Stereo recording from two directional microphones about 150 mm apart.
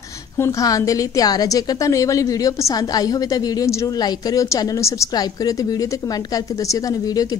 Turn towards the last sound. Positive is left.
turn(degrees=25)  # may be behind; listen again after turning